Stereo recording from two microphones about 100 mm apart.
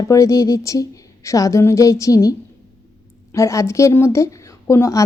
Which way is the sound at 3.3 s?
30° left (ahead or behind).